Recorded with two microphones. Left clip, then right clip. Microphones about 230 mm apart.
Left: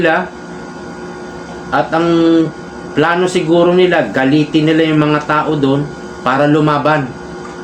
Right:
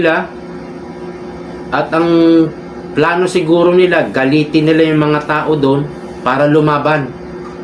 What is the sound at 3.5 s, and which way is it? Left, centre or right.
A man's voice, centre.